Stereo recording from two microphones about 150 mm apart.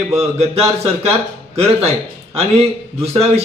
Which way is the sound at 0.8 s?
45° right (ahead or behind).